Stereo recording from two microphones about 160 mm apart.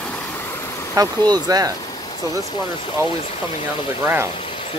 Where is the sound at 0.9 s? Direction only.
25° right (ahead or behind).